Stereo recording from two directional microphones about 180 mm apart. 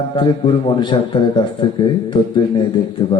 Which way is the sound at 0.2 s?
25° left (ahead or behind).